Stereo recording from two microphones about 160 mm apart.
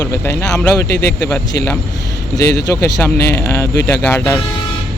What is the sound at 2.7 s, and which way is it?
Speech, 20° left (ahead or behind).